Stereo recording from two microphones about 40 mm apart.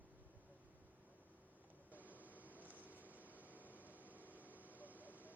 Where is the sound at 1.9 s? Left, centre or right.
Right.